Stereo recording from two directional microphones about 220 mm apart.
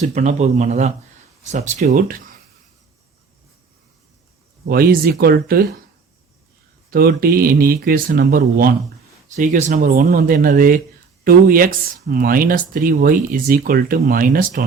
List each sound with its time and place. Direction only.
0.1 s speech: 30° right (ahead or behind)
4.7 s speech: 45° right (ahead or behind)
6.9 s speech: 45° right (ahead or behind)